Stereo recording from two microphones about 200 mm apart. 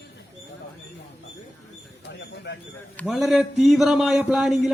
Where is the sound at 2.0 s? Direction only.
60° left (ahead or behind).